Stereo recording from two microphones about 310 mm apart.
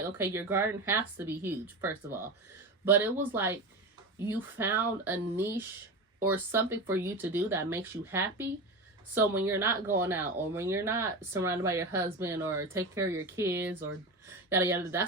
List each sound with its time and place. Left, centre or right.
0.2 s speech: centre